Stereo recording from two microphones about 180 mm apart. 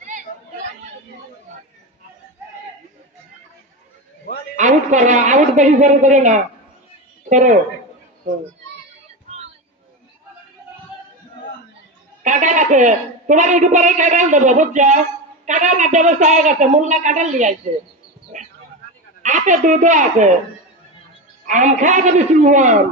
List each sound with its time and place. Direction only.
4.6 s a woman's voice: 40° right (ahead or behind)
12.2 s a woman's voice: 45° right (ahead or behind)
18.3 s a sound: 45° right (ahead or behind)
19.2 s a woman's voice: 45° right (ahead or behind)
21.5 s a woman's voice: 45° right (ahead or behind)